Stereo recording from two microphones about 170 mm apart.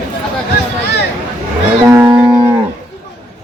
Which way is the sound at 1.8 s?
15° right (ahead or behind).